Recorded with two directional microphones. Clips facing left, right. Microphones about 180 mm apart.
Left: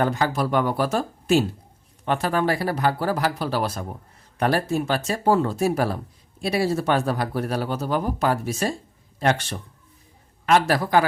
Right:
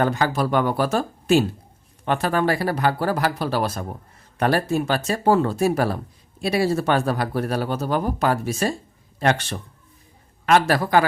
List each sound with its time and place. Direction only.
0.0 s speech: 70° right (ahead or behind)
6.6 s speech: 75° right (ahead or behind)